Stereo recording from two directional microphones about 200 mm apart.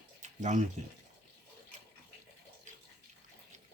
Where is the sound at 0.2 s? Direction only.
35° right (ahead or behind).